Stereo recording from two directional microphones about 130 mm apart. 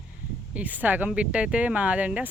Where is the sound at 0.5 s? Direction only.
10° right (ahead or behind).